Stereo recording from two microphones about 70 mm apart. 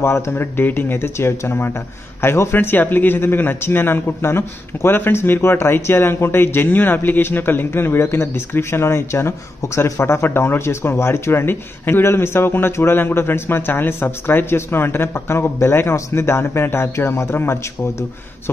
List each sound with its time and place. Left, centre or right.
0.0 s speech: left